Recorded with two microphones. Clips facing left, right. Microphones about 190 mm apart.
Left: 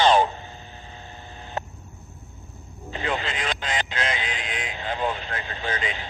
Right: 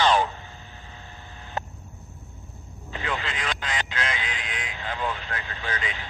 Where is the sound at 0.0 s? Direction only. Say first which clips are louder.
Left 3 dB; 25° left (ahead or behind).